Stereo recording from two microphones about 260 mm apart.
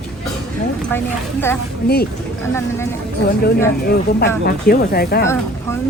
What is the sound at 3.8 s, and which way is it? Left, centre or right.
Speech, left.